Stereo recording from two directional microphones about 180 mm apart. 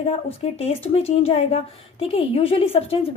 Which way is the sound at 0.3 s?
35° left (ahead or behind).